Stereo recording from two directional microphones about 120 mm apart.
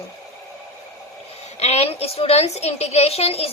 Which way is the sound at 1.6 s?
65° left (ahead or behind).